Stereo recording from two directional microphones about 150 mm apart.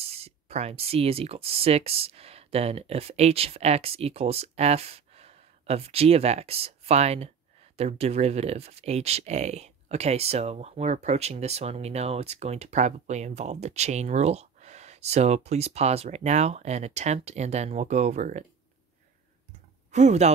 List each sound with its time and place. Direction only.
0.0 s speech: 40° right (ahead or behind)
19.9 s speech: 50° right (ahead or behind)